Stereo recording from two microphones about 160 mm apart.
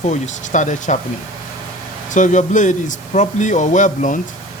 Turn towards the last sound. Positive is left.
turn(degrees=50)  # may be behind; listen again after turning